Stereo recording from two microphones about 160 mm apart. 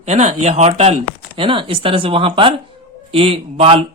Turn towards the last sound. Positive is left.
turn(degrees=-35)  # may be behind; listen again after turning